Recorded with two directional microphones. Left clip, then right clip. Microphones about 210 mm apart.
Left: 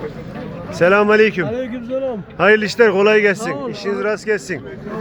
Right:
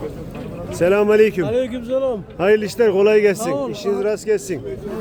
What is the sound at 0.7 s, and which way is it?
A man's voice, 15° right (ahead or behind).